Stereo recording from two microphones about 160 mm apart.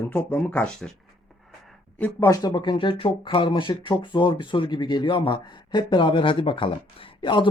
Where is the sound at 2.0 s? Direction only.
15° left (ahead or behind).